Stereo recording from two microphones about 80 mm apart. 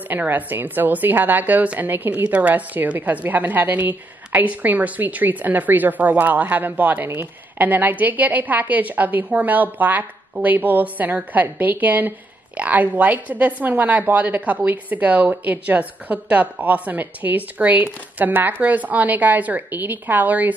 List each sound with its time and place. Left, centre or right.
0.1 s a woman's voice: right